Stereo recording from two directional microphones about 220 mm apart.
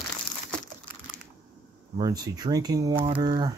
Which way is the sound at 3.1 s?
20° right (ahead or behind).